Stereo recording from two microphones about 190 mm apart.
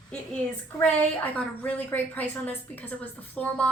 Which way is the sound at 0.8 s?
5° left (ahead or behind).